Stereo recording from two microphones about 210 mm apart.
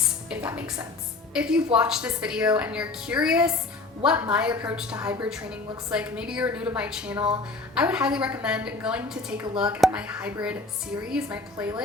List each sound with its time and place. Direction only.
0.3 s a woman's voice: 5° right (ahead or behind)